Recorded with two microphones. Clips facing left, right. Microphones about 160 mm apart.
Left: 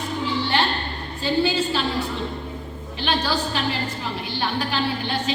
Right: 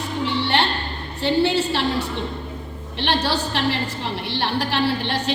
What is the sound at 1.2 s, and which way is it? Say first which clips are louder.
A woman's voice: right 2 dB; 70° right (ahead or behind).